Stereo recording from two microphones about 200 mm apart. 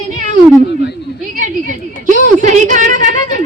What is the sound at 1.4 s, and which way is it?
A woman's voice, 40° right (ahead or behind).